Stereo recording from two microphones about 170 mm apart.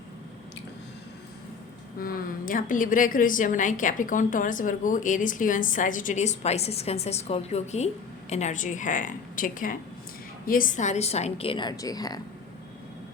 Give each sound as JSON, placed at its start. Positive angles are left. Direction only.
{"t": 2.0, "sound": "a woman's voice", "side_deg": 60}